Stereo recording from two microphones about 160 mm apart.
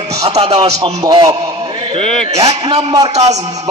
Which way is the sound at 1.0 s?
25° right (ahead or behind).